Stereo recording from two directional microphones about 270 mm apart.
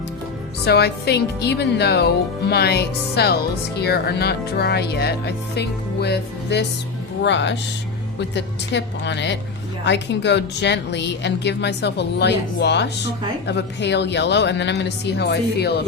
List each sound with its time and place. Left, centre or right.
0.6 s a woman's voice: left